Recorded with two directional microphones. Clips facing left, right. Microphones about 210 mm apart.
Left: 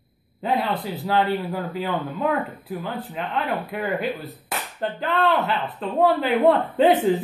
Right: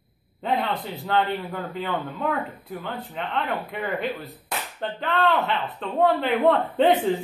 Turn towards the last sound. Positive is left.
turn(degrees=0)  # may be behind; listen again after turning